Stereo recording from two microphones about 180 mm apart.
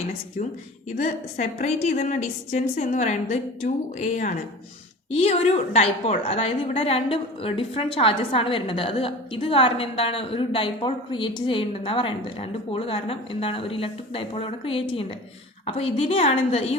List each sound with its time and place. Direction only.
0.4 s a woman's voice: 45° left (ahead or behind)
5.7 s a woman's voice: 35° left (ahead or behind)